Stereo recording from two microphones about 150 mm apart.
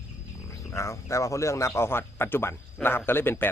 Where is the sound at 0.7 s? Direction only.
20° left (ahead or behind).